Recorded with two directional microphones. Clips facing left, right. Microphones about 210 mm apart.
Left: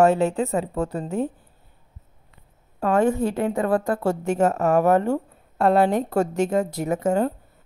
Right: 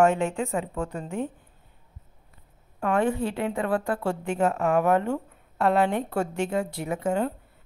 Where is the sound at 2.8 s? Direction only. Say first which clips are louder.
Left 4 dB; 40° left (ahead or behind).